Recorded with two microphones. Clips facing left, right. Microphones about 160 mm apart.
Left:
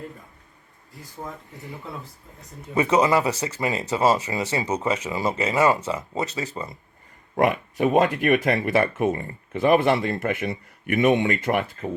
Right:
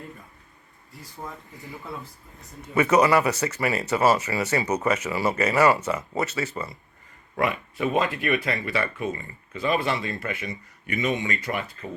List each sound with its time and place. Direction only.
2.9 s speech: 25° left (ahead or behind)
5.6 s speech: 15° left (ahead or behind)
6.2 s speech: 35° left (ahead or behind)
7.3 s speech: 50° left (ahead or behind)